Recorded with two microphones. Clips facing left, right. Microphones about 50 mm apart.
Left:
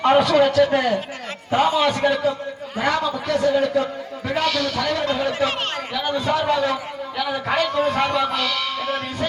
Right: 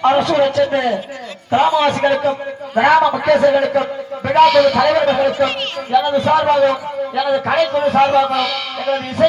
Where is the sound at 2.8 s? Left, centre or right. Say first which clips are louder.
Right 9 dB; right.